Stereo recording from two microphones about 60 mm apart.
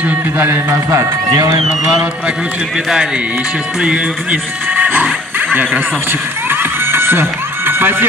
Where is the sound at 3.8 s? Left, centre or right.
Centre.